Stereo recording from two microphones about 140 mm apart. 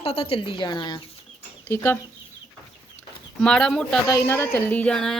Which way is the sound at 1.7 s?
15° left (ahead or behind).